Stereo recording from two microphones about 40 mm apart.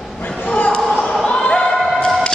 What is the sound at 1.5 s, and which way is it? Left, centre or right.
Basketball bounce, centre.